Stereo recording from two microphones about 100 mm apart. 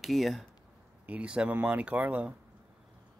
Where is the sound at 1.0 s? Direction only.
15° right (ahead or behind).